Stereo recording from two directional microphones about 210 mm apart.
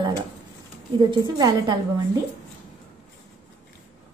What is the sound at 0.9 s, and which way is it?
Speech, 20° right (ahead or behind).